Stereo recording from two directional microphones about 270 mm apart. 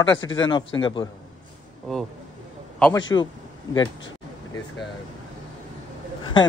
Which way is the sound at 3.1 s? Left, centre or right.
Centre.